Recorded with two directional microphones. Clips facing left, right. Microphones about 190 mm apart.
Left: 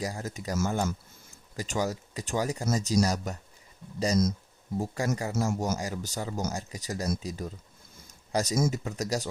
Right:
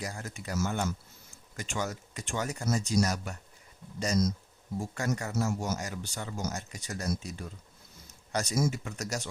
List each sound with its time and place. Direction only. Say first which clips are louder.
0.0 s speech: left 5 dB; 35° left (ahead or behind)
4.8 s speech: left 3 dB; 35° left (ahead or behind)
5.5 s speech: left 3 dB; 45° left (ahead or behind)